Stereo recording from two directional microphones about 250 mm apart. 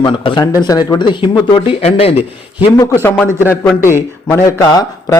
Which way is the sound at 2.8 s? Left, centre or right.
Centre.